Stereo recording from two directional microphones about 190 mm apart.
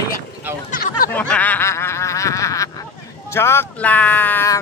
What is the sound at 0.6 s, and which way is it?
Speech, 45° left (ahead or behind).